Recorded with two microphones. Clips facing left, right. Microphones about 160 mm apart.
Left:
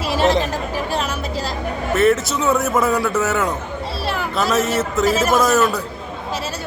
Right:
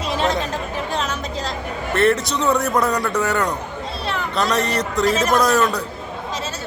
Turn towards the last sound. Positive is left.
turn(degrees=5)  # may be behind; listen again after turning